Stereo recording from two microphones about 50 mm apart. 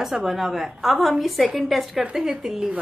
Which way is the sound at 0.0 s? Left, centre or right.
Centre.